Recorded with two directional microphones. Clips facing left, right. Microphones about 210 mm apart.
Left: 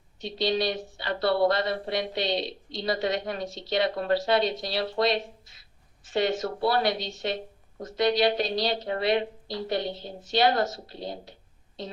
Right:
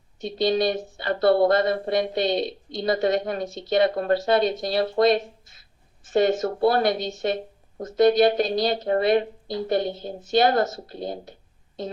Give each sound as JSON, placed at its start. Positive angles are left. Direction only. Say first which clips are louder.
{"t": 0.2, "sound": "speech", "louder": "right 5 dB", "side_deg": -50}